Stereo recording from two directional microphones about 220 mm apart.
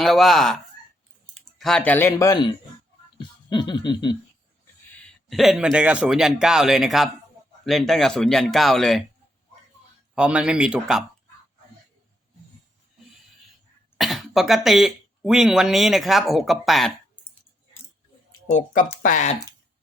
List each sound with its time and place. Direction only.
0.0 s speech: centre (ahead or behind); by 2.5 s 15° left (ahead or behind)
3.2 s music: 20° left (ahead or behind)
5.3 s speech: centre (ahead or behind)
10.2 s speech: 5° right (ahead or behind)
14.0 s speech: centre (ahead or behind)
18.4 s speech: 35° left (ahead or behind)